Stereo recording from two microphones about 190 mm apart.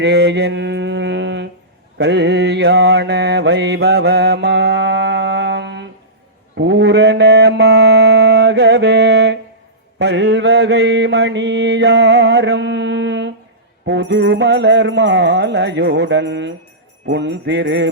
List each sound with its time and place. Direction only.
0.0 s music: 65° right (ahead or behind)
2.0 s mantra: 65° right (ahead or behind)
6.6 s music: 65° right (ahead or behind)
10.0 s mantra: 65° right (ahead or behind)
13.8 s music: 65° right (ahead or behind)